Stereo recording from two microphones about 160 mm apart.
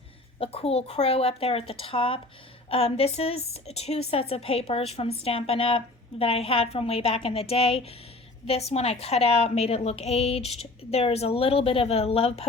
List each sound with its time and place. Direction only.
0.3 s a woman's voice: 40° left (ahead or behind)